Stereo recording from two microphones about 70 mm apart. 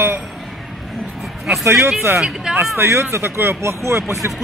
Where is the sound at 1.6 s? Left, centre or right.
Right.